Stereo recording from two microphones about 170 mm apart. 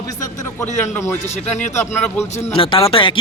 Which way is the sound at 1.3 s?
45° left (ahead or behind).